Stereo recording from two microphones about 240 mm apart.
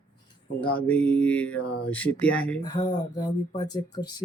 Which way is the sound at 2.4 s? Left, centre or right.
Centre.